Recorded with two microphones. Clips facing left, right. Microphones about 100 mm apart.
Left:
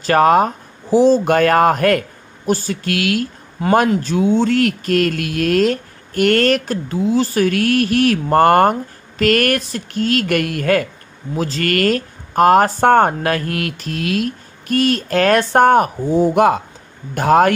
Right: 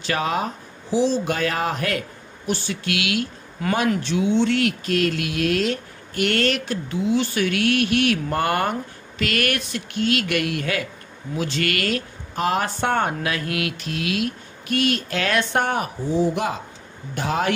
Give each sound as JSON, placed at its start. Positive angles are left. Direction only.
{"t": 0.0, "sound": "speech", "side_deg": 50}
{"t": 3.6, "sound": "speech", "side_deg": 30}
{"t": 4.0, "sound": "speech", "side_deg": 45}